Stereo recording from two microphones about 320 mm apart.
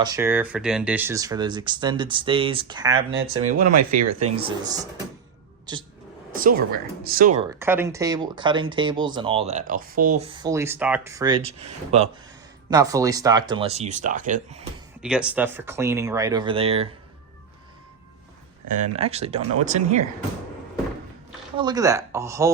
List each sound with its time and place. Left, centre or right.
0.0 s speech: centre
3.1 s speech: right
4.4 s speech: centre
6.3 s speech: right
7.6 s speech: centre
15.0 s speech: centre
18.9 s speech: centre
21.6 s speech: centre